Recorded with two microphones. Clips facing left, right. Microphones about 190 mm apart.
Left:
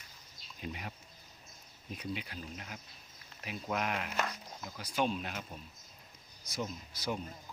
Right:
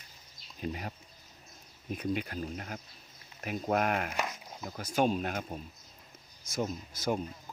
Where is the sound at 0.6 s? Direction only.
40° right (ahead or behind).